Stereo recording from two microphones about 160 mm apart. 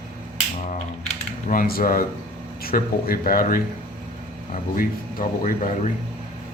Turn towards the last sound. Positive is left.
turn(degrees=55)  # may be behind; listen again after turning